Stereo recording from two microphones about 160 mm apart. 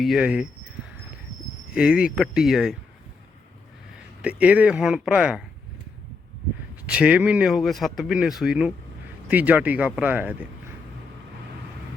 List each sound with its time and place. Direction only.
0.0 s speech: 5° right (ahead or behind)
1.7 s speech: 5° right (ahead or behind)
4.2 s speech: 10° right (ahead or behind)
6.8 s speech: 5° right (ahead or behind)